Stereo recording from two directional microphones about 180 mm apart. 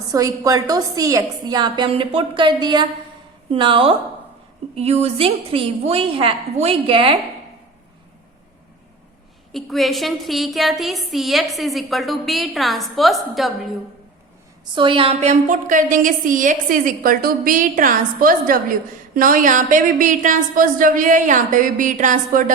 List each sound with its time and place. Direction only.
0.1 s a woman's voice: 20° right (ahead or behind)
9.5 s a woman's voice: centre (ahead or behind)
14.8 s a woman's voice: 30° right (ahead or behind); by 22.5 s 50° right (ahead or behind)